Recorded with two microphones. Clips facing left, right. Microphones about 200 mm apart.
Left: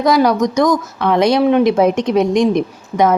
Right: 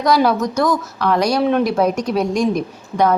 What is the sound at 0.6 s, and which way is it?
Speech, 20° left (ahead or behind).